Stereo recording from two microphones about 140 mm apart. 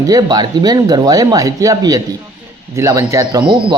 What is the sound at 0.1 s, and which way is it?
Speech, 30° right (ahead or behind).